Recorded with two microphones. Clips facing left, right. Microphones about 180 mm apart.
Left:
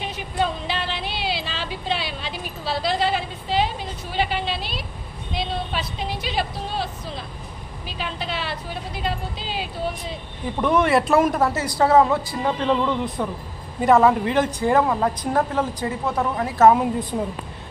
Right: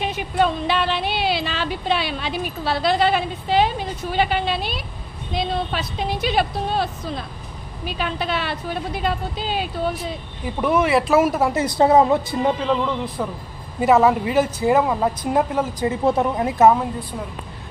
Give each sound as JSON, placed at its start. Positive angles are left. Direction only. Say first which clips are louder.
{"t": 0.7, "sound": "a sound", "louder": "right 6 dB", "side_deg": -60}
{"t": 5.3, "sound": "a woman's voice", "louder": "right 3 dB", "side_deg": -45}
{"t": 10.6, "sound": "speech", "louder": "even", "side_deg": -5}
{"t": 11.6, "sound": "a woman's voice", "louder": "right 2 dB", "side_deg": -20}
{"t": 12.5, "sound": "a woman's voice", "louder": "even", "side_deg": 0}